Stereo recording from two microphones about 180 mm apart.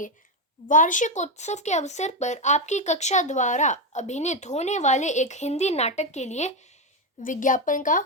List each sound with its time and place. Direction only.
0.7 s a woman's voice: 45° left (ahead or behind)